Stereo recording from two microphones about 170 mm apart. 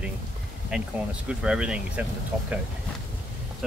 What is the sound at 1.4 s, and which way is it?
Speech, 5° right (ahead or behind).